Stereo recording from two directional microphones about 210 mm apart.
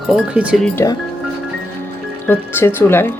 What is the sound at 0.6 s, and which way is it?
Speech, 10° left (ahead or behind).